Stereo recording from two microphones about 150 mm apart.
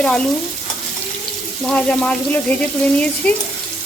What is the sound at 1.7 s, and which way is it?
Speech, 10° left (ahead or behind).